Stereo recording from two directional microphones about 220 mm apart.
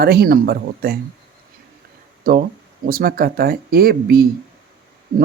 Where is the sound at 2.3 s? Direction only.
40° right (ahead or behind).